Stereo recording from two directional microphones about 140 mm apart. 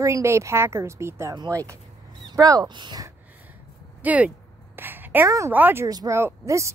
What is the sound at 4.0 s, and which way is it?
A woman's voice, 10° right (ahead or behind).